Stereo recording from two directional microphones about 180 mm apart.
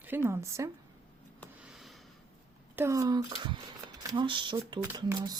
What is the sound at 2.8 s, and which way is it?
Speech, 15° right (ahead or behind).